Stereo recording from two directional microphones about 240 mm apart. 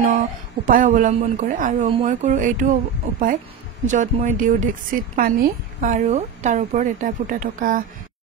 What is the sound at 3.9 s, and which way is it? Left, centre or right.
A woman's voice, right.